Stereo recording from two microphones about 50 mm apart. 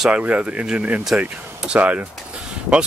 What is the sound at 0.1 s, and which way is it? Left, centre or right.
Speech, right.